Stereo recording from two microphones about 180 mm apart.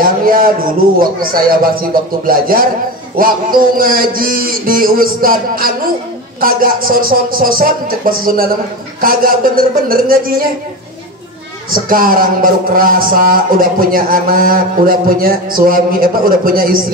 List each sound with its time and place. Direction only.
0.0 s a sound: 50° right (ahead or behind)
1.6 s speech: 55° right (ahead or behind)
11.7 s speech: 50° right (ahead or behind)